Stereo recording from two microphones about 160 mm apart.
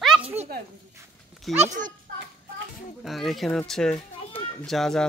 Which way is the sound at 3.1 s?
Centre (ahead or behind).